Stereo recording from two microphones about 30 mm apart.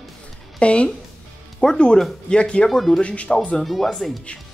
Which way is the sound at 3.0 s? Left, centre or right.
Left.